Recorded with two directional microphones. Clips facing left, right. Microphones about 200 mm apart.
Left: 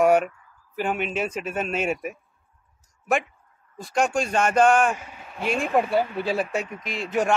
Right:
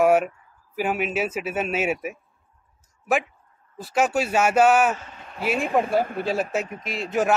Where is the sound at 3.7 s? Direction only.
5° right (ahead or behind).